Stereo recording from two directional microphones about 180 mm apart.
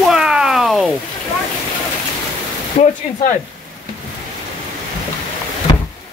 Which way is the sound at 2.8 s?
35° left (ahead or behind).